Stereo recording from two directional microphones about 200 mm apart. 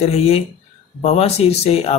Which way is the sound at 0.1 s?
30° left (ahead or behind).